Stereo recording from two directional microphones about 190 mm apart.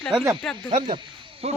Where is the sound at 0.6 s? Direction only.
25° right (ahead or behind).